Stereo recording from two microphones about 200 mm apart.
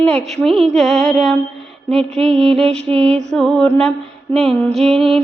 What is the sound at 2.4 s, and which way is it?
Music, centre (ahead or behind).